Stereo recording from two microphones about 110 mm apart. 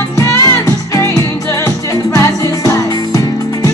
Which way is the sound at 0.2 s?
30° left (ahead or behind).